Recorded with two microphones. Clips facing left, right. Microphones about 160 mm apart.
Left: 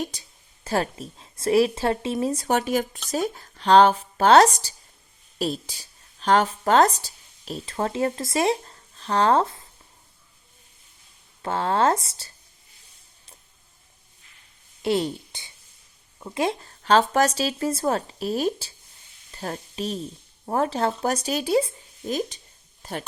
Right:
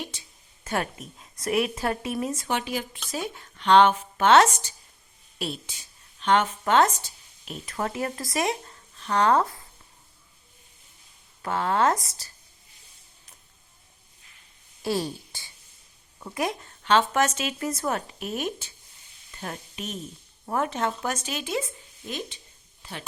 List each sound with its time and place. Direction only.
0.0 s speech: 40° left (ahead or behind)
11.4 s speech: 30° left (ahead or behind)
14.8 s a woman's voice: 20° left (ahead or behind); by 23.0 s 45° left (ahead or behind)